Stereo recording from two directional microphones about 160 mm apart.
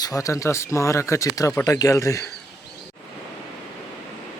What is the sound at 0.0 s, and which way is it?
Speech, 20° left (ahead or behind).